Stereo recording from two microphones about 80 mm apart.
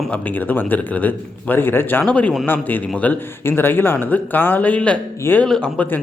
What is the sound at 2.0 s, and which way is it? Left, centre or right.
A man's voice, centre.